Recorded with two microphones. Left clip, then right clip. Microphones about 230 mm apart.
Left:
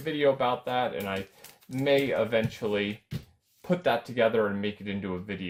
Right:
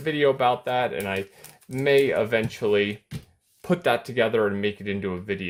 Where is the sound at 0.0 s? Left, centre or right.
Right.